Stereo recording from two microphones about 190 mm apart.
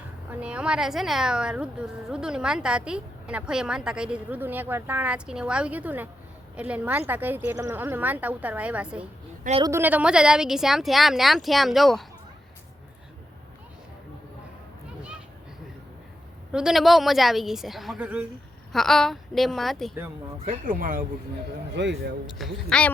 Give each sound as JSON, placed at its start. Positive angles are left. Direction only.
{"t": 0.3, "sound": "a woman's voice", "side_deg": -5}
{"t": 9.6, "sound": "a woman's voice", "side_deg": -15}
{"t": 16.5, "sound": "a woman's voice", "side_deg": -5}
{"t": 20.4, "sound": "speech", "side_deg": -40}
{"t": 21.8, "sound": "speech", "side_deg": -70}
{"t": 22.4, "sound": "a woman's voice", "side_deg": 0}